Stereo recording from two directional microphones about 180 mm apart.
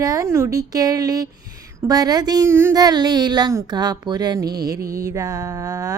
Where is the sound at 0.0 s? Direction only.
20° right (ahead or behind).